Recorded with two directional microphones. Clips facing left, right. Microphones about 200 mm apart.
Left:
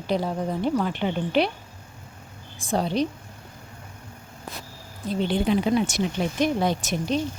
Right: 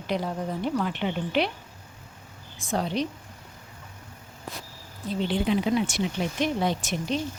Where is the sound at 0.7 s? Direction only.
40° left (ahead or behind).